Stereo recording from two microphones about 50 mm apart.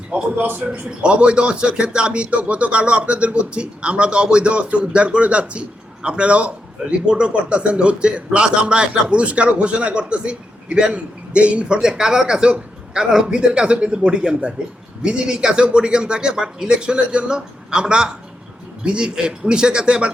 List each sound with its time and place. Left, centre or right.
0.3 s a man's voice: right
0.7 s speech: right